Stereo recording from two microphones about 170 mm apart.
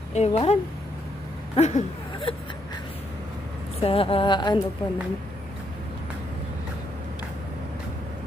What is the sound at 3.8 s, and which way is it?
Speech, 35° left (ahead or behind).